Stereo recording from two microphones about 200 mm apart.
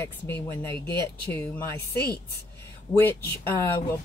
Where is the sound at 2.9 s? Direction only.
10° left (ahead or behind).